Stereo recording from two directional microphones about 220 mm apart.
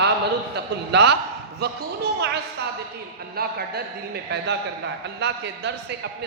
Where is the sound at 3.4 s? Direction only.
45° right (ahead or behind).